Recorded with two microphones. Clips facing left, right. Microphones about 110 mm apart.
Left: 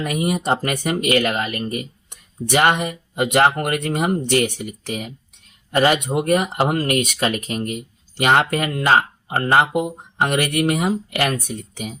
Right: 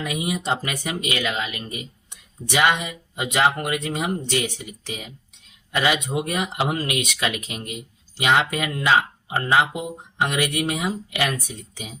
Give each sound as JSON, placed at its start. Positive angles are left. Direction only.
{"t": 0.0, "sound": "speech", "side_deg": 50}